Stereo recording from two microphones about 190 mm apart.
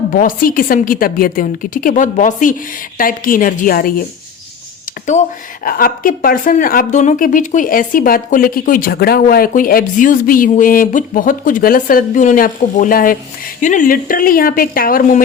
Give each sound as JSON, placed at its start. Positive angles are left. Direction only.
{"t": 0.1, "sound": "a woman's voice", "side_deg": 45}
{"t": 5.6, "sound": "a woman's voice", "side_deg": 50}